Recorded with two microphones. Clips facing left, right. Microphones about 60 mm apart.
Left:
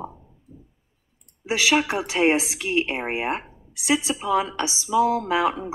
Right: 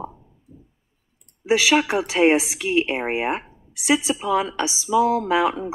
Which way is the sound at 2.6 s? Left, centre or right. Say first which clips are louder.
Right 3 dB; centre.